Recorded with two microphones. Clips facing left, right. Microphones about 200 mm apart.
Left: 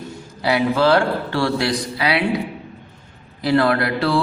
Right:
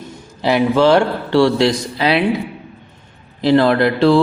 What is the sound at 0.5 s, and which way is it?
Speech, 20° right (ahead or behind).